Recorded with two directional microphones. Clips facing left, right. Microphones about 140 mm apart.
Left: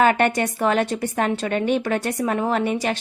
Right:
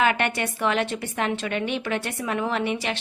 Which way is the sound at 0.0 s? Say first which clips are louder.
Left 5 dB; 40° left (ahead or behind).